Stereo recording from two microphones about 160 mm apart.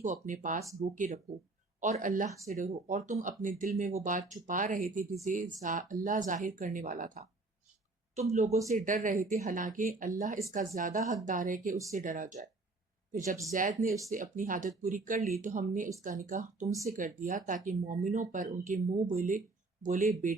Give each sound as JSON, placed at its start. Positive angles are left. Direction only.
{"t": 0.0, "sound": "speech", "side_deg": -55}
{"t": 8.1, "sound": "speech", "side_deg": -45}